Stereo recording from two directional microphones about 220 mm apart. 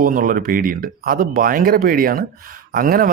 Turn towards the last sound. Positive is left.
turn(degrees=-40)  # may be behind; listen again after turning